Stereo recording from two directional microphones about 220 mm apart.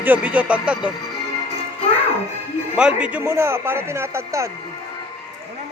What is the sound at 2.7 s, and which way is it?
A man's voice, 5° right (ahead or behind).